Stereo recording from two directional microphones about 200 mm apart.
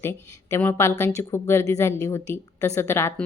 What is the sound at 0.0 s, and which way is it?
A woman's voice, 10° left (ahead or behind).